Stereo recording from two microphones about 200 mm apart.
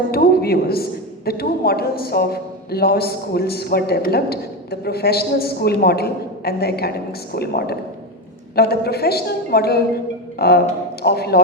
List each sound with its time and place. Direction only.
0.1 s a woman's voice: 50° left (ahead or behind)
10.3 s music: 50° left (ahead or behind)
11.0 s a woman's voice: 50° left (ahead or behind)